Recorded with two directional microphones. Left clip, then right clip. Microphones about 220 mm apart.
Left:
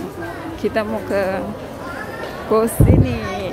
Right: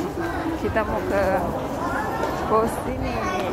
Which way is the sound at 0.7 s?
45° left (ahead or behind).